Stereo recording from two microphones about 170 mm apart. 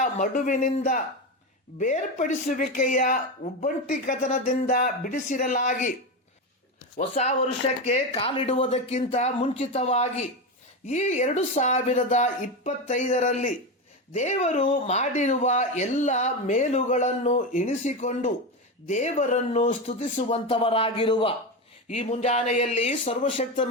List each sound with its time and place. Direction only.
0.0 s speech: 50° left (ahead or behind)
7.9 s speech: 35° left (ahead or behind)
21.8 s speech: 40° left (ahead or behind)